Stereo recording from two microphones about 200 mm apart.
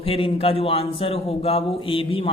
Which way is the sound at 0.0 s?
30° left (ahead or behind).